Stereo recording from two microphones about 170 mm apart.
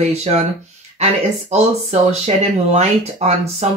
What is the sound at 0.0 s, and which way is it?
Speech, 40° right (ahead or behind).